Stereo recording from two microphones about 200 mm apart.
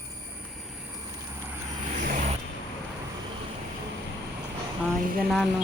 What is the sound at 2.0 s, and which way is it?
Vehicle, 40° right (ahead or behind).